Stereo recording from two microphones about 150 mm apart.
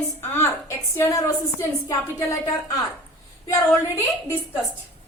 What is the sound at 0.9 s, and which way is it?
A woman's voice, 20° left (ahead or behind).